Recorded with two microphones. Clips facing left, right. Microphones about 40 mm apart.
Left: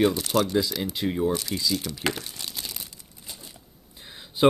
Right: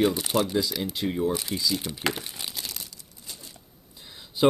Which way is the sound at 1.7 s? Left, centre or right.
Centre.